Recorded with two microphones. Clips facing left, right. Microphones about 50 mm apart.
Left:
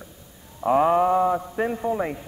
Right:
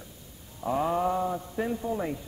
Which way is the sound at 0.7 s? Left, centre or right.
Left.